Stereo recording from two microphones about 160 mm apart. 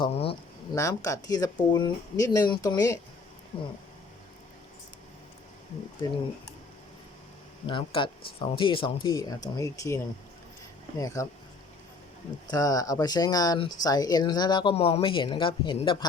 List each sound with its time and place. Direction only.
0.0 s speech: 35° left (ahead or behind)
0.7 s speech: 20° left (ahead or behind)
3.5 s speech: 30° left (ahead or behind)
7.7 s speech: 30° left (ahead or behind)
12.5 s speech: 25° left (ahead or behind)